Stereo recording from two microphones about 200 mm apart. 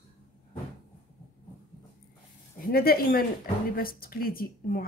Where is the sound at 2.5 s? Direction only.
50° left (ahead or behind).